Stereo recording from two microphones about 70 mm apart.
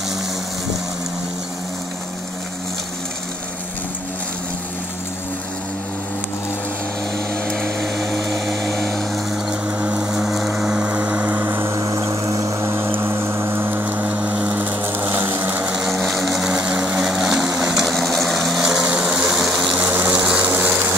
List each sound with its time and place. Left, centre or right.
8.6 s a sound: centre
9.7 s a sound: right
10.1 s music: centre; by 11.3 s right
11.3 s a sound: right
11.8 s music: right
15.7 s vehicle: centre
16.5 s vehicle: centre
18.9 s vehicle: centre
19.8 s vehicle: right